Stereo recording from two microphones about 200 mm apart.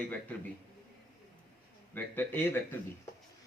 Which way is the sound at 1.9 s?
10° left (ahead or behind).